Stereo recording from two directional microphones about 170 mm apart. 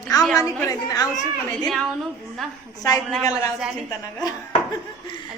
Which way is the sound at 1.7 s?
Centre (ahead or behind).